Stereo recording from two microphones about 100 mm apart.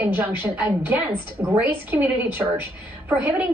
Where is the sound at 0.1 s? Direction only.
15° right (ahead or behind).